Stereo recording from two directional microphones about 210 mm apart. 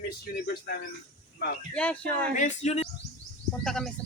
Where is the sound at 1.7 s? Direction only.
5° left (ahead or behind).